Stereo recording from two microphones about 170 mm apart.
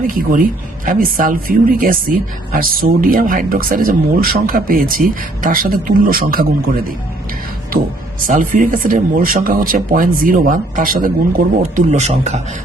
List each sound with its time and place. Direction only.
0.1 s speech: 55° right (ahead or behind)
8.3 s speech: 50° right (ahead or behind)